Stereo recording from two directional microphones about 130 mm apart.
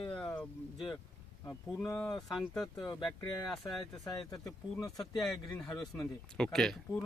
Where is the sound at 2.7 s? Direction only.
35° left (ahead or behind).